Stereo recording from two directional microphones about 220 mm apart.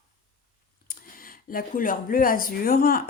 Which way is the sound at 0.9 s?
40° left (ahead or behind).